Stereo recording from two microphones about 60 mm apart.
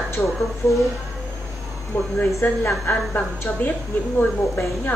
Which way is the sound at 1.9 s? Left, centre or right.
Left.